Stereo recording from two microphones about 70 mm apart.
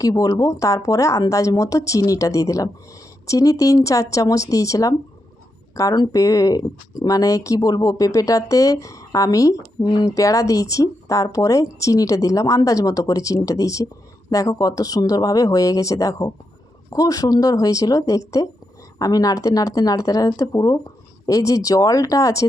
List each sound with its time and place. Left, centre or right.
0.0 s speech: left
9.8 s speech: left
10.1 s speech: left